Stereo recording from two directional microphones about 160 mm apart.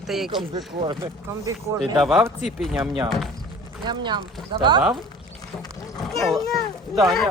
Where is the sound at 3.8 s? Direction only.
30° right (ahead or behind).